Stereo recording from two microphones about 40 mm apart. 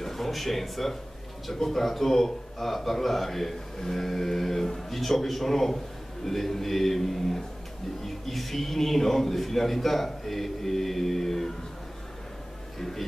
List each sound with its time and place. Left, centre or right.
0.0 s a man's voice: centre
12.7 s speech: centre